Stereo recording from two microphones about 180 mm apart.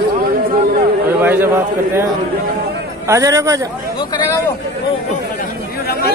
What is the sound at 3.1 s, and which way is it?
Speech, 20° right (ahead or behind).